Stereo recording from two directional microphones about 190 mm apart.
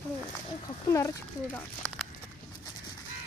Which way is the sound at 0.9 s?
15° left (ahead or behind).